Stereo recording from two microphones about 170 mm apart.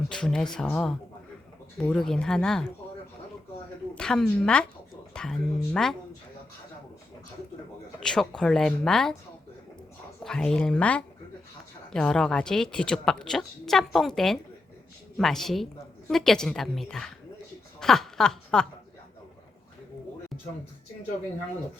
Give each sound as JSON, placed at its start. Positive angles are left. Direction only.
{"t": 0.1, "sound": "a woman's voice", "side_deg": 5}
{"t": 3.9, "sound": "a woman's voice", "side_deg": 5}
{"t": 7.9, "sound": "a woman's voice", "side_deg": 5}
{"t": 10.2, "sound": "a woman's voice", "side_deg": 5}